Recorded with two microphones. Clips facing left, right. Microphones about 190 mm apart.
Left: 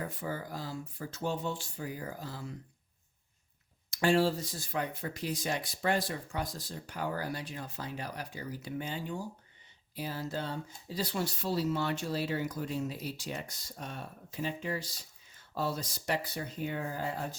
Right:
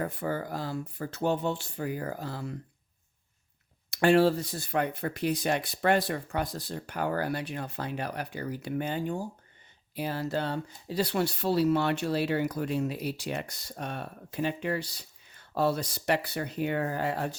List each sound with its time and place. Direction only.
0.0 s speech: 60° right (ahead or behind)
3.9 s speech: 60° right (ahead or behind)
9.9 s speech: 65° right (ahead or behind)